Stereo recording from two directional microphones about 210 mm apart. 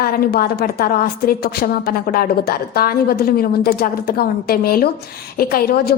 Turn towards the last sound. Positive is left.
turn(degrees=45)  # may be behind; listen again after turning